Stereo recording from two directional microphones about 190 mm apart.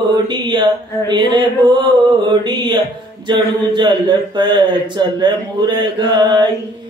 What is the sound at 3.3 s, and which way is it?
Speech, 25° right (ahead or behind).